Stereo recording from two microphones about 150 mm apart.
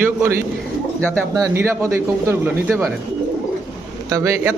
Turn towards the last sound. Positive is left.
turn(degrees=-20)  # may be behind; listen again after turning